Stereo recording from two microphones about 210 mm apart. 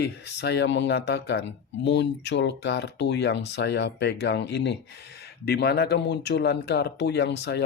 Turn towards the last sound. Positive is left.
turn(degrees=55)  # may be behind; listen again after turning